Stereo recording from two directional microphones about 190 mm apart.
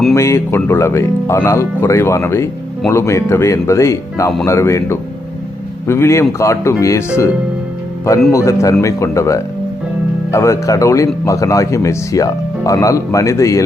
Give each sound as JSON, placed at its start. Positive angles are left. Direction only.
{"t": 0.1, "sound": "speech", "side_deg": 15}
{"t": 8.3, "sound": "speech", "side_deg": 15}